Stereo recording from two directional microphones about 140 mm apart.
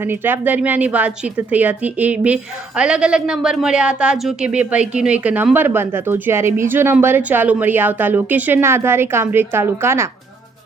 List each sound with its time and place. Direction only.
0.0 s a woman's voice: 15° right (ahead or behind)